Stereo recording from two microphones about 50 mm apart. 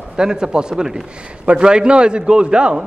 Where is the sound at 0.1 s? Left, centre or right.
Centre.